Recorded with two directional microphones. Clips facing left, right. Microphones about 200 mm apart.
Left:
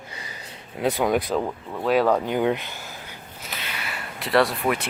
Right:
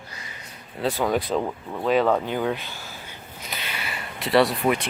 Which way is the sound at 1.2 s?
Centre (ahead or behind).